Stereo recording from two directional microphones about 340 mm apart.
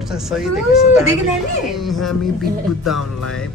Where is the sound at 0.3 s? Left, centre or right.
Centre.